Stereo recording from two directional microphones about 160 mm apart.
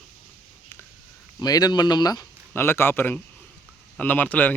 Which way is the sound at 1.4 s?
25° left (ahead or behind).